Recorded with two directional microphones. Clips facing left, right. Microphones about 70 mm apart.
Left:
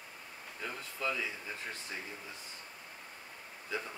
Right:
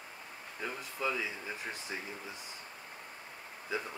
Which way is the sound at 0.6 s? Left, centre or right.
Centre.